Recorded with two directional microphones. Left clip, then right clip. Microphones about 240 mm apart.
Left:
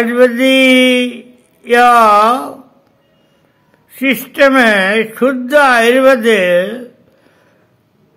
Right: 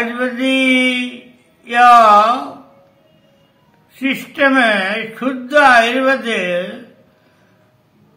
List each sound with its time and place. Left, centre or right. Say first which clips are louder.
0.0 s speech: left 9 dB; left
3.9 s speech: left 5 dB; left